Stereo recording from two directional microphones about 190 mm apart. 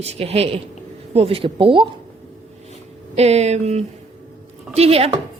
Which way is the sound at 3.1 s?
35° right (ahead or behind).